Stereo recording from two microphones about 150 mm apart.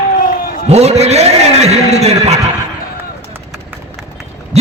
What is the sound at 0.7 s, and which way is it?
A man's voice, 45° right (ahead or behind).